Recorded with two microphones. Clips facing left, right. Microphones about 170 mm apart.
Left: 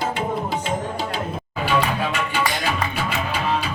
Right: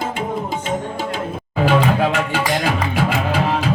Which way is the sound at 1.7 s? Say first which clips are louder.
Right 5 dB; 90° right.